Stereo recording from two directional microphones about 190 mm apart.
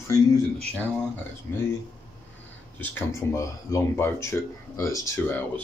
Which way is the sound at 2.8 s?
15° left (ahead or behind).